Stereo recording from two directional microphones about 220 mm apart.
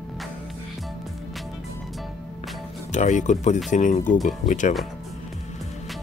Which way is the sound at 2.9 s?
35° left (ahead or behind).